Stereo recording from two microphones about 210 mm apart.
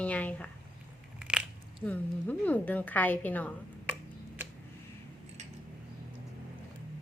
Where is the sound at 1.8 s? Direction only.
5° left (ahead or behind).